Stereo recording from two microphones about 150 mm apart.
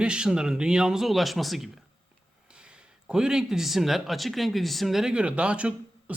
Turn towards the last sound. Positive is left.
turn(degrees=-5)  # may be behind; listen again after turning